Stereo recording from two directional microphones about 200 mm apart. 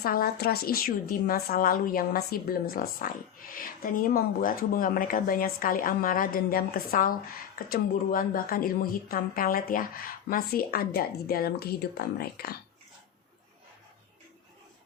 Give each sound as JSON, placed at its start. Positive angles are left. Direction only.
{"t": 0.0, "sound": "a woman's voice", "side_deg": 50}